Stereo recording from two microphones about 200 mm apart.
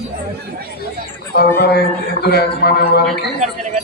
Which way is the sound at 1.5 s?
55° left (ahead or behind).